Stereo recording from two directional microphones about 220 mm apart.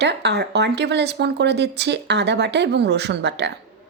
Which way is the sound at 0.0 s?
50° right (ahead or behind).